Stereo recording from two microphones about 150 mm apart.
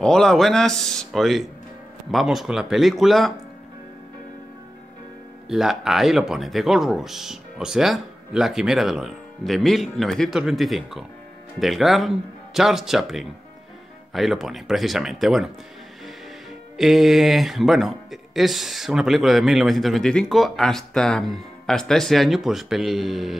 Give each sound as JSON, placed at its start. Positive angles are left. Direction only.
{"t": 0.0, "sound": "speech", "side_deg": 5}
{"t": 5.5, "sound": "speech", "side_deg": 0}
{"t": 16.7, "sound": "speech", "side_deg": 0}